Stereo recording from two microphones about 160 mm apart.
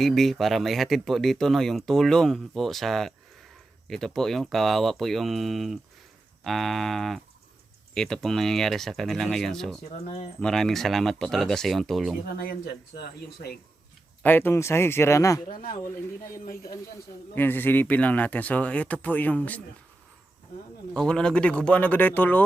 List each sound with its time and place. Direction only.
0.0 s speech: centre (ahead or behind)
9.9 s speech: 45° left (ahead or behind)
10.4 s speech: centre (ahead or behind)
12.4 s speech: 75° left (ahead or behind)
14.2 s speech: 10° left (ahead or behind)
15.4 s speech: 60° left (ahead or behind)
17.3 s speech: 10° left (ahead or behind)
20.9 s speech: 5° left (ahead or behind)